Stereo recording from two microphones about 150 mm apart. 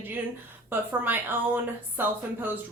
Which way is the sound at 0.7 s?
15° right (ahead or behind).